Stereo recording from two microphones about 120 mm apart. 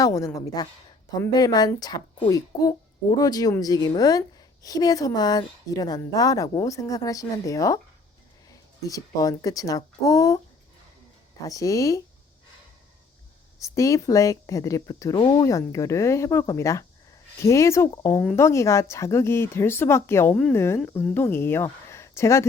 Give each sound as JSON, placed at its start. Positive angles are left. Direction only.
{"t": 0.0, "sound": "a woman's voice", "side_deg": 30}
{"t": 8.9, "sound": "speech", "side_deg": 30}
{"t": 11.4, "sound": "speech", "side_deg": 30}
{"t": 13.6, "sound": "speech", "side_deg": 25}
{"t": 15.1, "sound": "a woman's voice", "side_deg": 40}
{"t": 15.4, "sound": "speech", "side_deg": 25}